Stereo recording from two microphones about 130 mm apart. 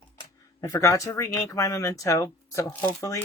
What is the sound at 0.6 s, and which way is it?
Speech, 20° left (ahead or behind).